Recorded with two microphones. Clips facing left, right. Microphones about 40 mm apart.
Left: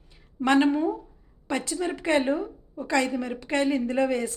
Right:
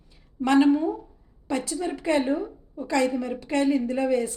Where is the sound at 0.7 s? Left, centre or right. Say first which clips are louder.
Right 3 dB; centre.